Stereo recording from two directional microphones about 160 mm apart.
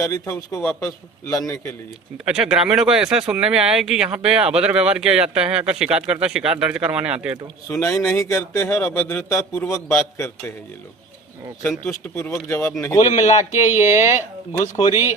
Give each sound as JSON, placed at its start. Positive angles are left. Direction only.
{"t": 0.0, "sound": "a man's voice", "side_deg": 20}
{"t": 0.6, "sound": "a man's voice", "side_deg": 5}
{"t": 0.8, "sound": "a man's voice", "side_deg": 20}
{"t": 2.2, "sound": "speech", "side_deg": -5}
{"t": 7.7, "sound": "a man's voice", "side_deg": 20}
{"t": 11.6, "sound": "a man's voice", "side_deg": 10}
{"t": 13.0, "sound": "speech", "side_deg": 45}